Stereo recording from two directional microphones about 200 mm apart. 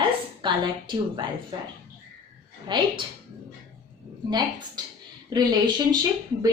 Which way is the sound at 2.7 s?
25° right (ahead or behind).